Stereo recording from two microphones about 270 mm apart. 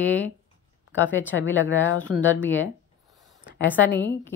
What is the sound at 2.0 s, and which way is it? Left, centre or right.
Speech, centre.